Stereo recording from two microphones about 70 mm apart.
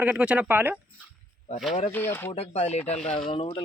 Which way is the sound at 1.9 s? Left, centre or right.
Left.